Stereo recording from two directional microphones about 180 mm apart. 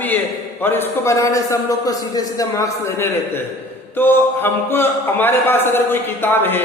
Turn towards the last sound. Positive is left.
turn(degrees=10)  # may be behind; listen again after turning